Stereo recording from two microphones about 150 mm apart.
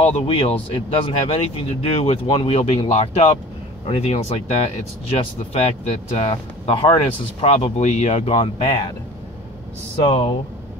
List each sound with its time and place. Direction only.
0.0 s speech: 40° left (ahead or behind)
8.4 s speech: 35° left (ahead or behind)
10.0 s speech: 45° left (ahead or behind)